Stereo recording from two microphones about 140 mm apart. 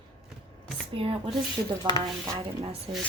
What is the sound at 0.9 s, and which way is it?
Speech, 40° right (ahead or behind).